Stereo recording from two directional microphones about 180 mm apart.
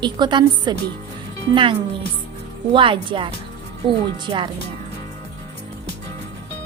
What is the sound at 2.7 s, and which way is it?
Speech, 30° right (ahead or behind).